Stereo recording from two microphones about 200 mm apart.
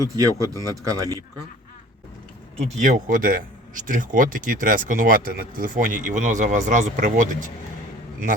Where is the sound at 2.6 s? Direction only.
40° right (ahead or behind).